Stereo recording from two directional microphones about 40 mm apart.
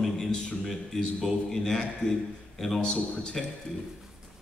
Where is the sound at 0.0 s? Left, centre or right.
Centre.